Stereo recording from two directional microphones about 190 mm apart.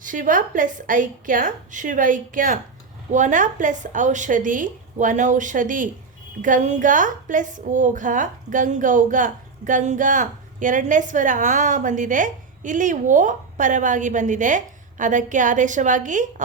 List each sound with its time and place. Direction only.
0.0 s a woman's voice: 45° right (ahead or behind)